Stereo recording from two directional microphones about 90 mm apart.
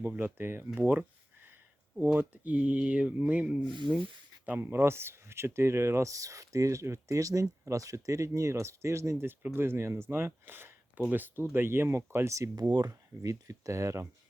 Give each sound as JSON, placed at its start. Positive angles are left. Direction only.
{"t": 0.0, "sound": "speech", "side_deg": -25}
{"t": 4.4, "sound": "speech", "side_deg": -20}